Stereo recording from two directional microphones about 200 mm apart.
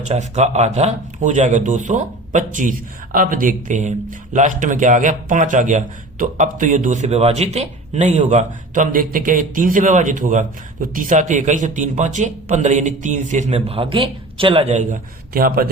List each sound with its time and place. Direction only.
0.0 s speech: 35° right (ahead or behind)